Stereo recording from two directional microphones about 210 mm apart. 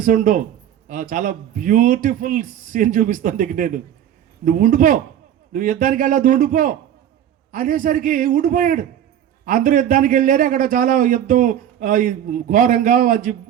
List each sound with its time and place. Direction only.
0.0 s a man's voice: 40° right (ahead or behind)